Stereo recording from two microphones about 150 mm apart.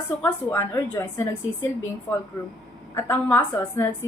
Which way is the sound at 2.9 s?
15° left (ahead or behind).